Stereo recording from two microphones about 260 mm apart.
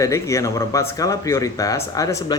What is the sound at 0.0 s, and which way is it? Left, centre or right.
Speech, centre.